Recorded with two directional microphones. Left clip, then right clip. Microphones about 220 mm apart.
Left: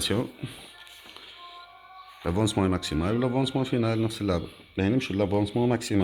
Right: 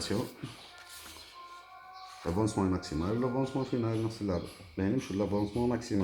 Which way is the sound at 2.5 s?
50° left (ahead or behind).